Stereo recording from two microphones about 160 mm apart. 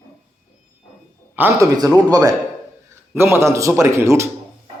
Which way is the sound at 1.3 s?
10° right (ahead or behind).